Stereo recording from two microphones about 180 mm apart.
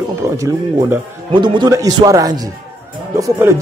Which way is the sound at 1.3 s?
25° right (ahead or behind).